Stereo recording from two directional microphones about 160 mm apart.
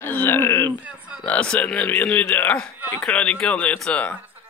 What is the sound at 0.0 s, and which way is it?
Speech, 10° left (ahead or behind).